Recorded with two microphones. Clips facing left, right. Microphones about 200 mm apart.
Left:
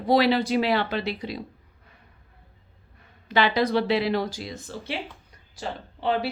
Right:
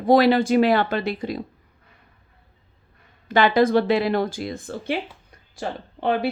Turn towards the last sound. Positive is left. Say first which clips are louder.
# right 3 dB
turn(degrees=-55)  # may be behind; listen again after turning